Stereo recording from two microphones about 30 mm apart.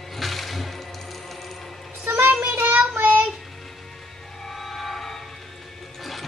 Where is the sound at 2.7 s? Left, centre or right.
Right.